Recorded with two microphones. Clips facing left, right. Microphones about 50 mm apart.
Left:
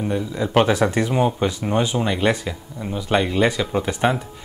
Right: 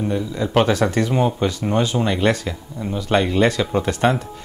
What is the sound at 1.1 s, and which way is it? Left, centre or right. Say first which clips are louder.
Speech: even; centre.